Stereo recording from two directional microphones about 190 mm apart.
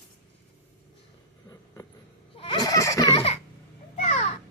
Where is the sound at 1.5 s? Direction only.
15° left (ahead or behind).